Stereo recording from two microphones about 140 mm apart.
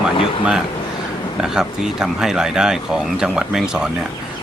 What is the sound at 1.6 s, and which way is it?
A man's voice, 5° right (ahead or behind).